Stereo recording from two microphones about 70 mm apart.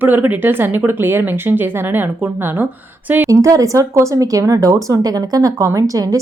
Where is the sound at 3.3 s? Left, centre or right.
Right.